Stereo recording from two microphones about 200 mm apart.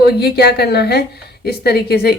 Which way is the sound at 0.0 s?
55° left (ahead or behind).